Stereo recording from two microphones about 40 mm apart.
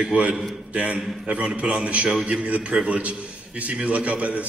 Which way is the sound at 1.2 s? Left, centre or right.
Right.